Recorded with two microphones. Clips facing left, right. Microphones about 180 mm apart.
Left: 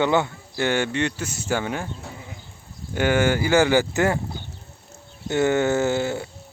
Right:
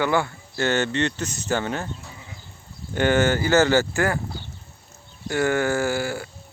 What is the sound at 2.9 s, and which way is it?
Speech, 10° left (ahead or behind).